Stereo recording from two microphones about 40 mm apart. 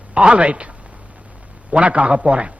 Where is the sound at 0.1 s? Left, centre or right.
Right.